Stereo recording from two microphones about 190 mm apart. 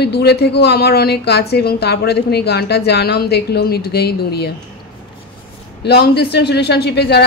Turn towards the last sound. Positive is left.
turn(degrees=60)  # may be behind; listen again after turning